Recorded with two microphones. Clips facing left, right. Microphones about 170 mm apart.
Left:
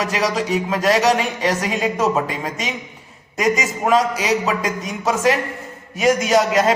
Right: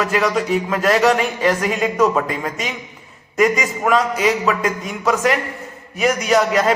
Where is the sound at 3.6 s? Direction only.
20° left (ahead or behind).